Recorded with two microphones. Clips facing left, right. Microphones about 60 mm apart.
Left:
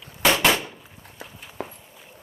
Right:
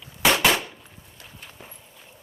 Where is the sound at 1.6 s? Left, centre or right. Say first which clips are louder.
Left 15 dB; left.